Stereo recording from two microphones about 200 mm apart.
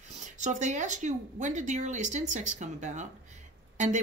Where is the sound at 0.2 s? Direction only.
35° right (ahead or behind).